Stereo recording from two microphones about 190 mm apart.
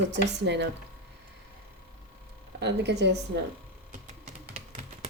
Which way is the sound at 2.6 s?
65° right (ahead or behind).